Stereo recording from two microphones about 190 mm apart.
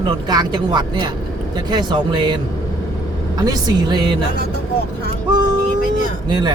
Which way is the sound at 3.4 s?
20° right (ahead or behind).